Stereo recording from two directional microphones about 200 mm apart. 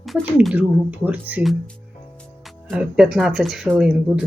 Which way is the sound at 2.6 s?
5° right (ahead or behind).